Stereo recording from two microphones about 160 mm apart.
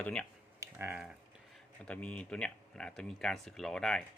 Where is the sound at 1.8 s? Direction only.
5° left (ahead or behind).